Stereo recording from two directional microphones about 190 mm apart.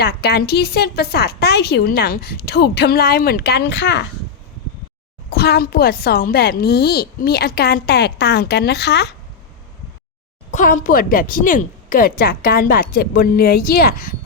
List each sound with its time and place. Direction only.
0.0 s a woman's voice: 60° left (ahead or behind)
5.3 s a woman's voice: 60° left (ahead or behind)
10.5 s speech: 40° left (ahead or behind)